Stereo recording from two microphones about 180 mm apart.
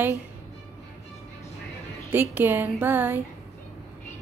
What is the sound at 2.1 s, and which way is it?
A woman's voice, 10° right (ahead or behind).